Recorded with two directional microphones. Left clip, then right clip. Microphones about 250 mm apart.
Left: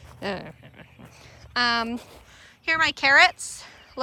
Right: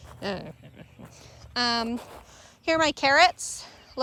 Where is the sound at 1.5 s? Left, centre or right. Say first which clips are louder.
Left 3 dB; centre.